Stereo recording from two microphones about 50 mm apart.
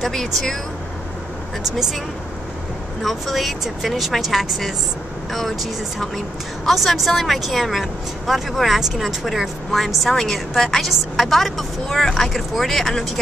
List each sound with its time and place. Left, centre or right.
0.0 s a woman's voice: centre
3.0 s a woman's voice: centre